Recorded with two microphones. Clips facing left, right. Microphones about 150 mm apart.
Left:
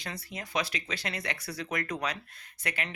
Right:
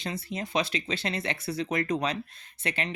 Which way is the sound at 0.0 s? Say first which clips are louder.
Right 6 dB; 25° right (ahead or behind).